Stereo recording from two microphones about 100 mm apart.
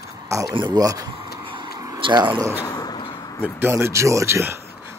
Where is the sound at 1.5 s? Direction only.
55° right (ahead or behind).